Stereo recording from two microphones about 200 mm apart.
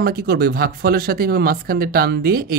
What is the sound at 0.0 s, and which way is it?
Speech, 50° right (ahead or behind).